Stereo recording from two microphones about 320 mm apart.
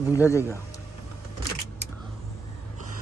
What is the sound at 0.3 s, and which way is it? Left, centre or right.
Speech, centre.